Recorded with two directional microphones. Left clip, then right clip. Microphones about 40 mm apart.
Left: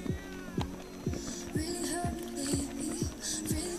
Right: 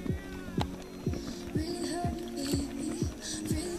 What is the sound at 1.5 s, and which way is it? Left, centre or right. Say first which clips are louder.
Music: right 1 dB; left.